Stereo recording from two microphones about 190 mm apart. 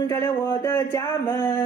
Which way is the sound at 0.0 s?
15° left (ahead or behind).